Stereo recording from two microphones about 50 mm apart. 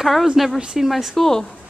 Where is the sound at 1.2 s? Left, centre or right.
Centre.